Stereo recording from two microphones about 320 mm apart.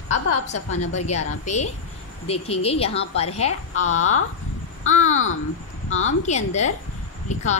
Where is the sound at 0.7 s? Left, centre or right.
Left.